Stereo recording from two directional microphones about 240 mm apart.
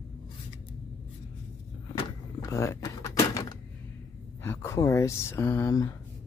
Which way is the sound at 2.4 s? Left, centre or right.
Centre.